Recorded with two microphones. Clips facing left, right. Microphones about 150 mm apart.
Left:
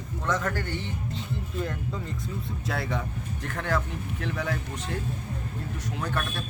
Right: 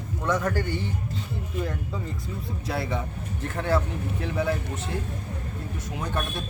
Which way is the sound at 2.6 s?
5° right (ahead or behind).